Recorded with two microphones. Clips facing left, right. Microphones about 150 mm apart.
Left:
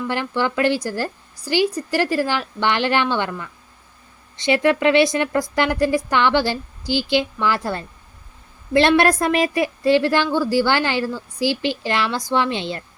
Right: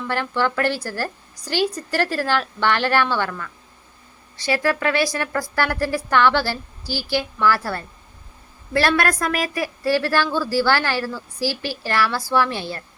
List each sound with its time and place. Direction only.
0.1 s a woman's voice: 15° left (ahead or behind)